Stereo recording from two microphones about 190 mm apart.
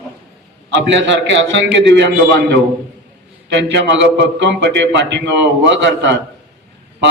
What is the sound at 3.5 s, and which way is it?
A man's voice, 65° right (ahead or behind).